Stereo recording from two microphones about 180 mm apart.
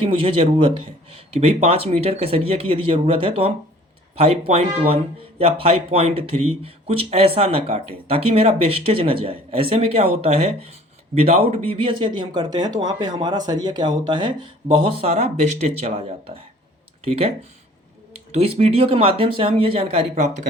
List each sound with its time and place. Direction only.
0.0 s speech: 30° right (ahead or behind)